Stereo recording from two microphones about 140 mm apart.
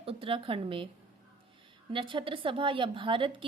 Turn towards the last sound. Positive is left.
turn(degrees=-35)  # may be behind; listen again after turning